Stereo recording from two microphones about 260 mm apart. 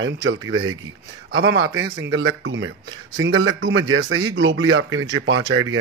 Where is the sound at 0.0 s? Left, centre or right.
Right.